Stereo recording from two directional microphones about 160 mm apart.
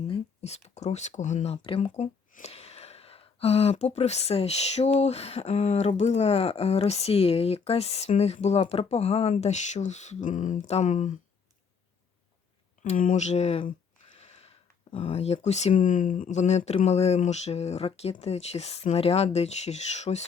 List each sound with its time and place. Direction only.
0.1 s speech: 40° left (ahead or behind)
1.6 s speech: 35° left (ahead or behind)
12.8 s speech: 50° left (ahead or behind)